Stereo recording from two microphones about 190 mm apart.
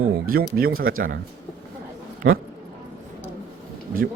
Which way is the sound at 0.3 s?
55° right (ahead or behind).